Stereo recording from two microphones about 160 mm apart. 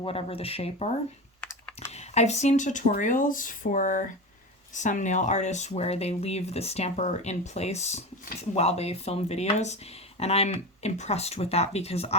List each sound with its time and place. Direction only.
0.0 s speech: 35° left (ahead or behind)
1.4 s computer keyboard: 10° left (ahead or behind)
1.9 s speech: 45° left (ahead or behind)